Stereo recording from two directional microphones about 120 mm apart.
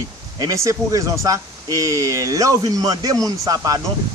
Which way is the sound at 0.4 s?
30° right (ahead or behind).